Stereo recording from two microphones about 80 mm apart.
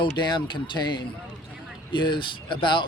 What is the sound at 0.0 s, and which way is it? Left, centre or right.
Speech, left.